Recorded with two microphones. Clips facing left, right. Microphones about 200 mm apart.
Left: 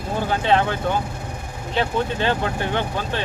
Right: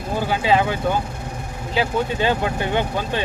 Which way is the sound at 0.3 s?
5° right (ahead or behind).